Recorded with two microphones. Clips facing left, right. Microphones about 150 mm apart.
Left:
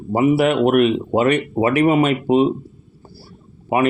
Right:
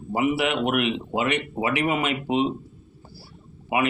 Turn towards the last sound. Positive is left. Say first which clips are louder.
# left 6 dB
turn(degrees=45)  # may be behind; listen again after turning